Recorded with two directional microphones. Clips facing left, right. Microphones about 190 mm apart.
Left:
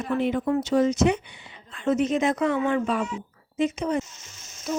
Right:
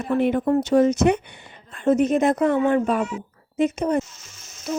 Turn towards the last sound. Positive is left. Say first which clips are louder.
# right 4 dB
turn(degrees=-55)  # may be behind; listen again after turning